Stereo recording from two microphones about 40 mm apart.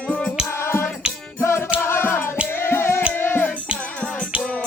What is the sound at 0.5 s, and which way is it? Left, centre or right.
Music, left.